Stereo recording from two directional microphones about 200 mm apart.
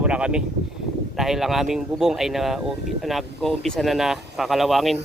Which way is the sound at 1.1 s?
Centre (ahead or behind).